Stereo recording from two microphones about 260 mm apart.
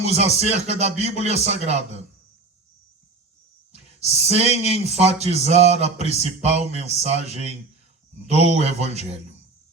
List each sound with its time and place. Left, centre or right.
0.0 s speech: right
3.7 s speech: right